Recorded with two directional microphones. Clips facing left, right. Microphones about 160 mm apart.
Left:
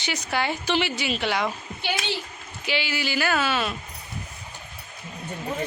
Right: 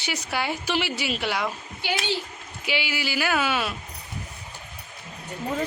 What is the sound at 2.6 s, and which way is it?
A woman's voice, 10° right (ahead or behind).